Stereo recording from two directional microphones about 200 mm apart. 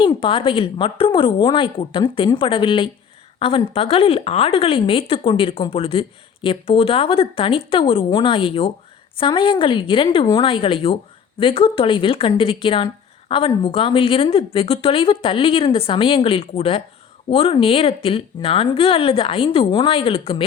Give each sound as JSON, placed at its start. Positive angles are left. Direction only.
{"t": 0.0, "sound": "speech", "side_deg": 25}